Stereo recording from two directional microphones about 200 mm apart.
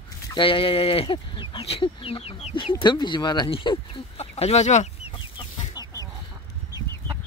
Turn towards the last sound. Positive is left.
turn(degrees=20)  # may be behind; listen again after turning